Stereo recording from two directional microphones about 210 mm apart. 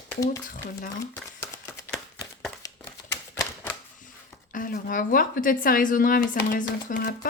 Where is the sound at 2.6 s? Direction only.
15° left (ahead or behind).